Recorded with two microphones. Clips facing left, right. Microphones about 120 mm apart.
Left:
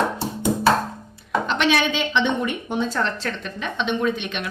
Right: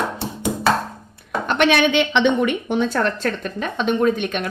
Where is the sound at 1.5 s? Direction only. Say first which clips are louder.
Right 5 dB; 55° right (ahead or behind).